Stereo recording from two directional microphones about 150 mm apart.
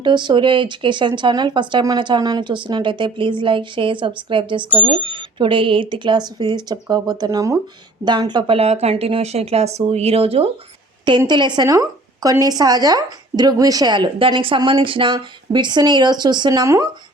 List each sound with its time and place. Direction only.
0.0 s a woman's voice: 30° right (ahead or behind)
8.5 s speech: 45° right (ahead or behind)
11.3 s a woman's voice: 30° right (ahead or behind)